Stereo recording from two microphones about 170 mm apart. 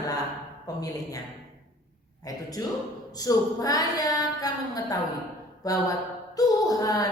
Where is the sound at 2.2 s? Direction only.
20° left (ahead or behind).